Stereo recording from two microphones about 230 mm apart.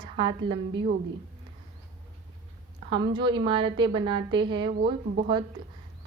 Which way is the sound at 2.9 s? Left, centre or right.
Centre.